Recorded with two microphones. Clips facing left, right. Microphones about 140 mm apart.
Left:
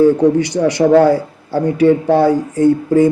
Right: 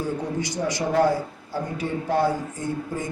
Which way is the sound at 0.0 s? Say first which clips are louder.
Left 17 dB; 75° left (ahead or behind).